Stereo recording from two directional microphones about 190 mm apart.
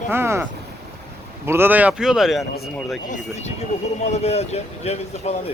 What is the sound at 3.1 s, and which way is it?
Speech, 40° left (ahead or behind).